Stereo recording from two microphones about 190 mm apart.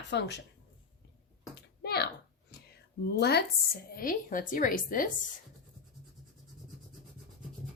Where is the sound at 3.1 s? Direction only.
60° left (ahead or behind).